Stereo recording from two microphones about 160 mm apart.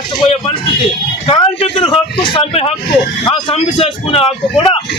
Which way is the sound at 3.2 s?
35° left (ahead or behind).